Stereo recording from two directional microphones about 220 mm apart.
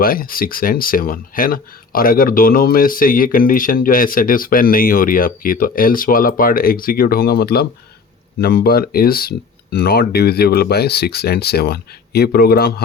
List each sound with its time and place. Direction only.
0.0 s speech: 40° left (ahead or behind)